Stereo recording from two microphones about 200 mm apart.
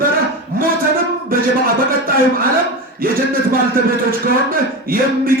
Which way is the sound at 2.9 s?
45° right (ahead or behind).